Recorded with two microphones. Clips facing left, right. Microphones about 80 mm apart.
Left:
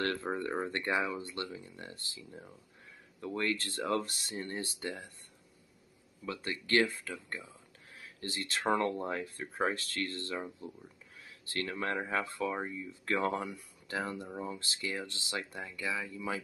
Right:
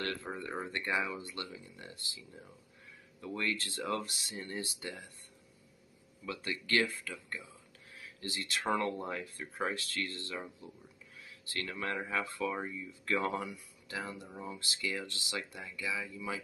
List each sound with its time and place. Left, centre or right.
0.0 s speech: left
6.2 s speech: left